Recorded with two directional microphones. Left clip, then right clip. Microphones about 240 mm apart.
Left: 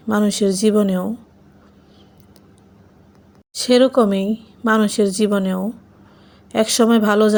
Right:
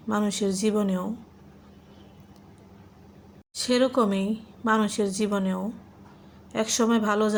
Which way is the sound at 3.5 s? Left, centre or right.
Left.